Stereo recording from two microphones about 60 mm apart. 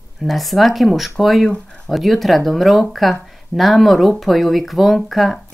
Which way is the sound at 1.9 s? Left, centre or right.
Centre.